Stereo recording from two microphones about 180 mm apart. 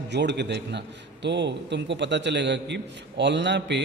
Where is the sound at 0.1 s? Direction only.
75° right (ahead or behind).